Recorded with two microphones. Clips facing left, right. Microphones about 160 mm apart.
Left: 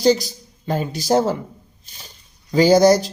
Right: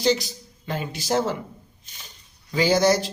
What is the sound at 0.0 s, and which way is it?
Speech, 40° left (ahead or behind).